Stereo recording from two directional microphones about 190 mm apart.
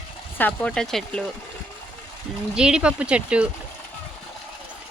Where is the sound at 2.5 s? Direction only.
5° right (ahead or behind).